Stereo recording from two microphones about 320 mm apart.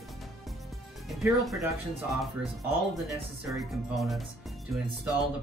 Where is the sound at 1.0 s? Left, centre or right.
Centre.